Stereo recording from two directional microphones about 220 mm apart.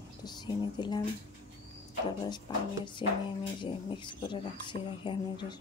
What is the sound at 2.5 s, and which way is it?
Speech, 20° left (ahead or behind).